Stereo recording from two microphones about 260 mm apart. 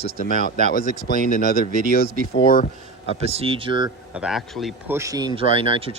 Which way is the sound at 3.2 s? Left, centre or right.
Right.